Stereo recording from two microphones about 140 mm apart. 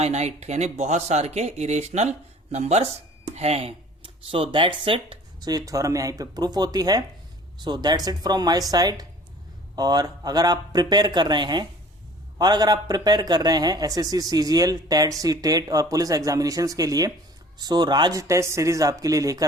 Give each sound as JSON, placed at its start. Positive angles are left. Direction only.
{"t": 0.0, "sound": "speech", "side_deg": -50}